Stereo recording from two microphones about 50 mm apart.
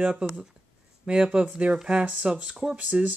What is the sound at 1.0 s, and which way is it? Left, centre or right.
Speech, centre.